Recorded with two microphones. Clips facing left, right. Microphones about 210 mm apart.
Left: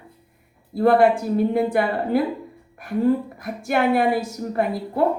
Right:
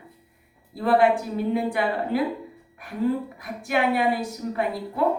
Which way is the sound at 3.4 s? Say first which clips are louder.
Left 3 dB; 45° left (ahead or behind).